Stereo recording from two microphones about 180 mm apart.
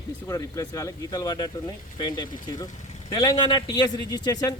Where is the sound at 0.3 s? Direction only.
20° left (ahead or behind).